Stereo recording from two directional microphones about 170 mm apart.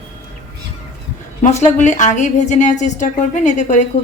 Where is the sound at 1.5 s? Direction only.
45° left (ahead or behind).